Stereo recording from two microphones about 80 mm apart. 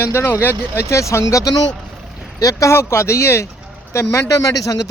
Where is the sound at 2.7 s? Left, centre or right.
Left.